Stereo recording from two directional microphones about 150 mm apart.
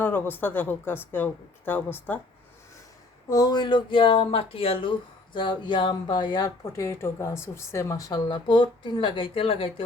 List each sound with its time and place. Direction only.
0.0 s speech: 15° left (ahead or behind)
3.2 s speech: 25° left (ahead or behind)